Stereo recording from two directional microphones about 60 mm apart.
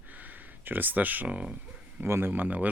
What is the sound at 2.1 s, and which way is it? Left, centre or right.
Speech, right.